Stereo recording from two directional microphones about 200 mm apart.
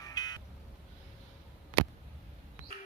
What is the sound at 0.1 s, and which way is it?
Music, 20° left (ahead or behind).